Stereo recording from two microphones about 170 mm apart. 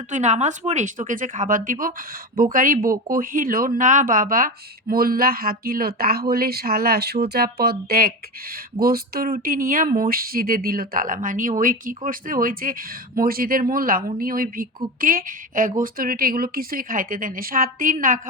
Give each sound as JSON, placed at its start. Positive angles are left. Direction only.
{"t": 0.1, "sound": "speech", "side_deg": -45}